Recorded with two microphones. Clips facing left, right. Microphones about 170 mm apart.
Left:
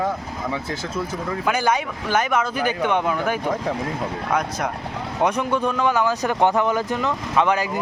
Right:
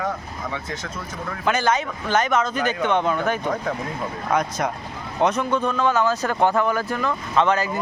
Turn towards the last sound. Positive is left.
turn(degrees=15)  # may be behind; listen again after turning